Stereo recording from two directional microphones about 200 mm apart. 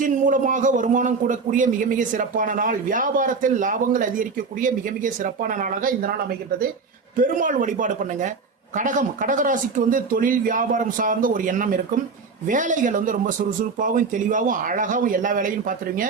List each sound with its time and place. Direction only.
0.0 s a man's voice: 40° right (ahead or behind)